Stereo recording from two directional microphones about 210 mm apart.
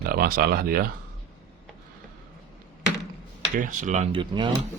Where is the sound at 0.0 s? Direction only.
45° right (ahead or behind).